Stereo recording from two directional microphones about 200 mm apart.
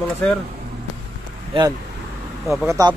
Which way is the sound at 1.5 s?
20° right (ahead or behind).